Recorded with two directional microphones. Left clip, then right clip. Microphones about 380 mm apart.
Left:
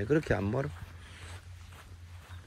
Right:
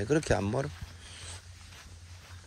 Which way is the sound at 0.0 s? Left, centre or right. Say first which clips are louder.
Right 1 dB; centre.